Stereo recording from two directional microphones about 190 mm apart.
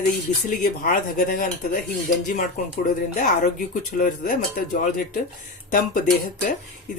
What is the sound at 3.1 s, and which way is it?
Speech, 40° left (ahead or behind).